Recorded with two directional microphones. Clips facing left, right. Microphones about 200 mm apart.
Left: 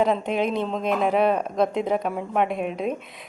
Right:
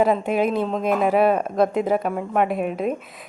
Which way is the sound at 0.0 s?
5° right (ahead or behind).